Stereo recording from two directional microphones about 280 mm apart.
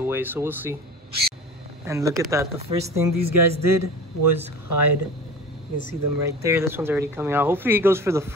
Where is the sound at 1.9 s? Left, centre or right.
Centre.